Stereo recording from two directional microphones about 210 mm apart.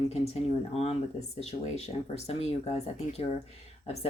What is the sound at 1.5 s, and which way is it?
Speech, 30° left (ahead or behind).